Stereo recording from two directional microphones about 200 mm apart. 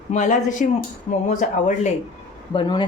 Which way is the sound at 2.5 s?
25° left (ahead or behind).